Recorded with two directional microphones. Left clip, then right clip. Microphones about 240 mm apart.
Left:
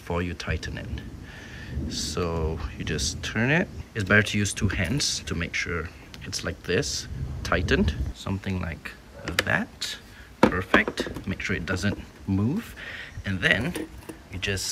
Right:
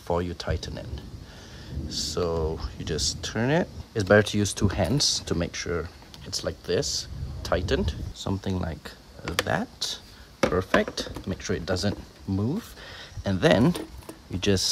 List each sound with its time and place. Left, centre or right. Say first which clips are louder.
0.1 s speech: right 2 dB; centre